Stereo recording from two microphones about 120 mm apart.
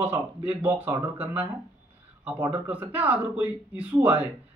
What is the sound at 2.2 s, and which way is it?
A man's voice, 15° right (ahead or behind).